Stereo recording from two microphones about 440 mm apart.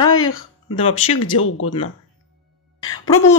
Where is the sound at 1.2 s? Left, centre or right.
Left.